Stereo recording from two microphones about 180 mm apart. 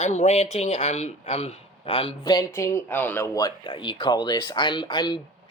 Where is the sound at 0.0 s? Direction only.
40° left (ahead or behind).